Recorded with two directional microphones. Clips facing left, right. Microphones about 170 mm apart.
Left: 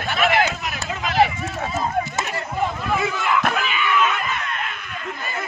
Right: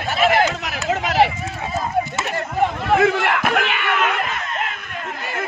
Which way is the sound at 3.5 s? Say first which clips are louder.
Right 1 dB; 70° right (ahead or behind).